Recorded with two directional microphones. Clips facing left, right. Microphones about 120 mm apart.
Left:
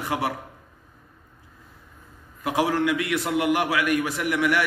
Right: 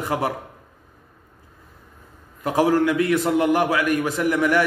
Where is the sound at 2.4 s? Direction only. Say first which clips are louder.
Right 4 dB; 40° right (ahead or behind).